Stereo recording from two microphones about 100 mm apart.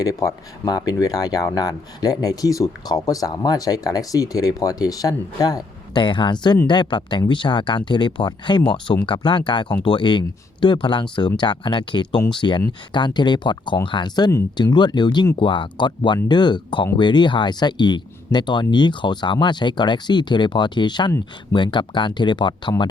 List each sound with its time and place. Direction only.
0.0 s speech: 35° left (ahead or behind)